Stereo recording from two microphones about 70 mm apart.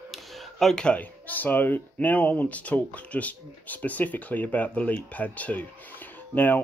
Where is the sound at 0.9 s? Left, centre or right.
Left.